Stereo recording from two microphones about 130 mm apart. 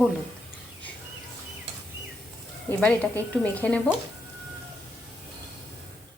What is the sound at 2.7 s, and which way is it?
Speech, 10° left (ahead or behind).